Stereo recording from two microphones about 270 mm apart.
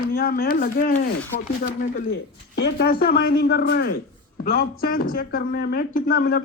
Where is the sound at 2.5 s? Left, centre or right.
Left.